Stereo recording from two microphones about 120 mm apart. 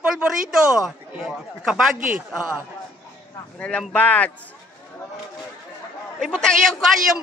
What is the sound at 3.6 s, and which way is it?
Speech, 10° left (ahead or behind).